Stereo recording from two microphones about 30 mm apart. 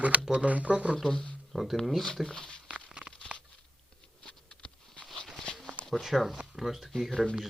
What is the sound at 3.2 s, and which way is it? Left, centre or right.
Crunch, left.